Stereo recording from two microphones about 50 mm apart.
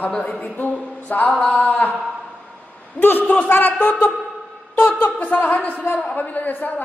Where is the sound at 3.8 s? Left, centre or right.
Left.